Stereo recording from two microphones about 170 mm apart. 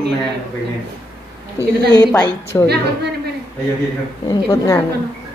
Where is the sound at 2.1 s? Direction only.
15° left (ahead or behind).